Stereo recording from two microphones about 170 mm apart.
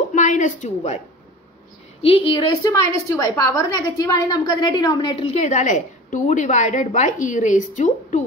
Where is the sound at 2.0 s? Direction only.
30° left (ahead or behind).